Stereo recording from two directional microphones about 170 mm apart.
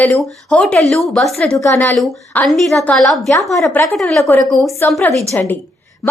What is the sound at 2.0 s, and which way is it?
A woman's voice, 5° left (ahead or behind).